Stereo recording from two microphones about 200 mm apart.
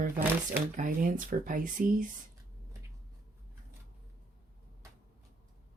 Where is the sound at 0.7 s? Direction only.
40° right (ahead or behind).